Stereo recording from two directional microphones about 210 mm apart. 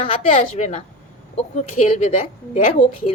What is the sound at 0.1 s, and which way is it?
A woman's voice, 35° left (ahead or behind).